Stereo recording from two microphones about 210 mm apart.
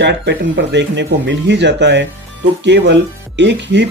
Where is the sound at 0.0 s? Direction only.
55° right (ahead or behind).